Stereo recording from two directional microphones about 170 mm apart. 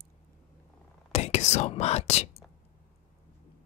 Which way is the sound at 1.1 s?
40° left (ahead or behind).